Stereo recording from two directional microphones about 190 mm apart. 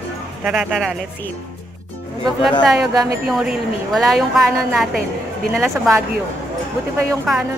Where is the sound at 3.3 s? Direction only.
Centre (ahead or behind).